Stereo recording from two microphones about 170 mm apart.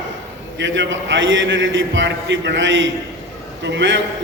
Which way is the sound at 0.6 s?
90° right.